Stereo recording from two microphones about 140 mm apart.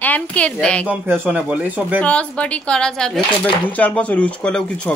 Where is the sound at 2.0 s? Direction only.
10° left (ahead or behind).